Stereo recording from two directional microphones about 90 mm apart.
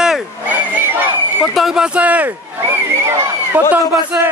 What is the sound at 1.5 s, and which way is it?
Speech, 5° right (ahead or behind).